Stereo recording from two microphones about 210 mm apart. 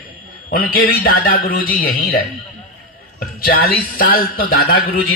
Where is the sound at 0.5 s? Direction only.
45° left (ahead or behind).